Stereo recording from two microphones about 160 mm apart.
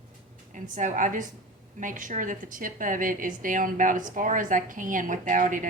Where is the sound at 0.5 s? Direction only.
50° right (ahead or behind).